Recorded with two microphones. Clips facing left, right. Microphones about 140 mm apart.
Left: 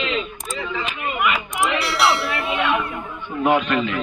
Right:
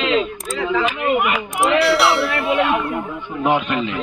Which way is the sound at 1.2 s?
50° right (ahead or behind).